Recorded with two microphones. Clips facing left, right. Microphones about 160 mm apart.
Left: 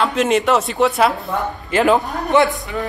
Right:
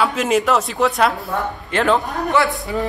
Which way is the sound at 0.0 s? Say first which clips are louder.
Left 1 dB; centre (ahead or behind).